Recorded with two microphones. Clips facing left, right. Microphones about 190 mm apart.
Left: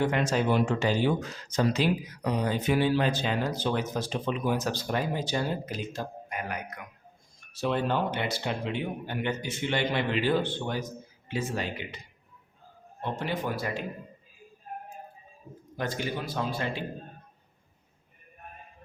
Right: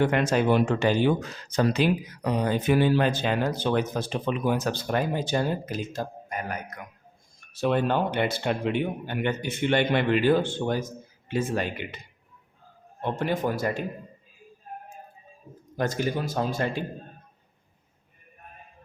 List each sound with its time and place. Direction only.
0.0 s speech: 60° right (ahead or behind)
13.0 s a man's voice: 50° right (ahead or behind)
15.8 s a man's voice: 45° right (ahead or behind)